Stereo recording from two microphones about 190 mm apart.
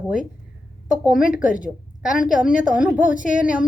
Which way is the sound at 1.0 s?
5° right (ahead or behind).